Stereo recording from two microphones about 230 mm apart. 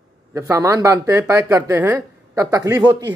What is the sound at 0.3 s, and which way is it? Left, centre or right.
A man's voice, centre.